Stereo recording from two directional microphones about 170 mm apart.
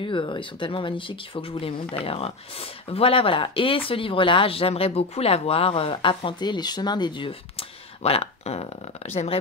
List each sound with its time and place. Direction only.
0.0 s speech: 30° left (ahead or behind)